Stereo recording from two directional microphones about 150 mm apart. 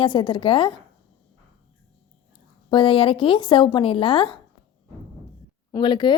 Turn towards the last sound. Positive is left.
turn(degrees=30)  # may be behind; listen again after turning